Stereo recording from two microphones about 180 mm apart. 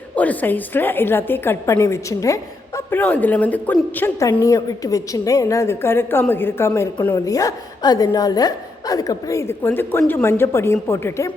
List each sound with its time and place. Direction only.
0.2 s a woman's voice: 10° left (ahead or behind)